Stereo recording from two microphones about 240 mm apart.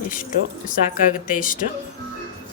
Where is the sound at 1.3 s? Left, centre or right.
Left.